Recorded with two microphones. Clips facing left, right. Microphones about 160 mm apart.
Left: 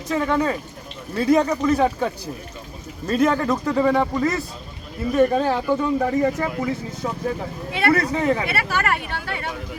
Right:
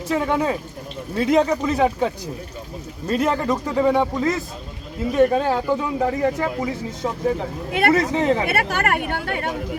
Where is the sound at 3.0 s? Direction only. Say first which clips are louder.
Left 1 dB; 10° right (ahead or behind).